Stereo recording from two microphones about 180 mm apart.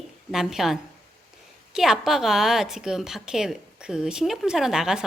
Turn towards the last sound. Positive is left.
turn(degrees=-5)  # may be behind; listen again after turning